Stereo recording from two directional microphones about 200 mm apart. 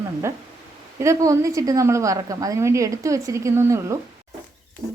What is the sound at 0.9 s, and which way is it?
A woman's voice, 15° right (ahead or behind).